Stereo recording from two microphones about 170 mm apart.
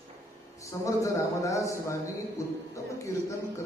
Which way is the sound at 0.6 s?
20° left (ahead or behind).